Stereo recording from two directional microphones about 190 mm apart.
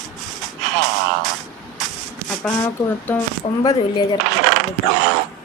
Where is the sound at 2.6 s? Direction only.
10° left (ahead or behind).